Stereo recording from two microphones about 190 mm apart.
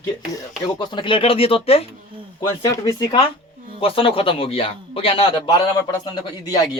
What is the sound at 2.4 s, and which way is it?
A man's voice, 20° left (ahead or behind).